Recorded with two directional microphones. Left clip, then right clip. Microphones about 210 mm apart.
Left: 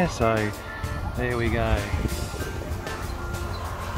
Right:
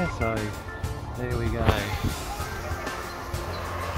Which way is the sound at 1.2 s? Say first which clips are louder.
Left 5 dB; 30° left (ahead or behind).